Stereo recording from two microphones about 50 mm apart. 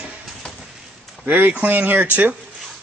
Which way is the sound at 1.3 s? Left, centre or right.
Right.